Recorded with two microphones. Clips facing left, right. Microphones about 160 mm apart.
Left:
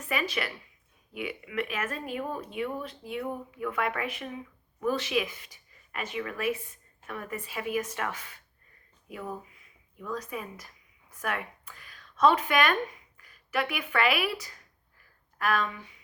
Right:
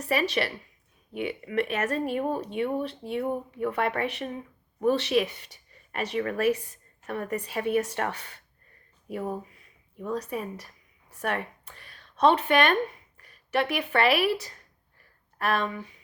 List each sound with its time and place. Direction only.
0.0 s speech: 35° right (ahead or behind)
5.7 s a sound: 35° right (ahead or behind)
6.1 s speech: 40° right (ahead or behind)
15.4 s speech: 30° right (ahead or behind)